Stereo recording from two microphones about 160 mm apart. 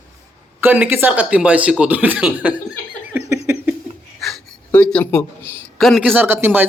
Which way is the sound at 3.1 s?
15° right (ahead or behind).